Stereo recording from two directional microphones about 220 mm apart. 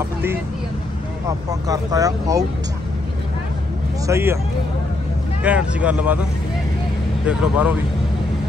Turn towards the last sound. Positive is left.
turn(degrees=-5)  # may be behind; listen again after turning